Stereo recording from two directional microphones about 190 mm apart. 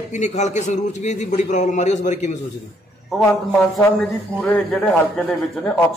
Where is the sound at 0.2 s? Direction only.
40° left (ahead or behind).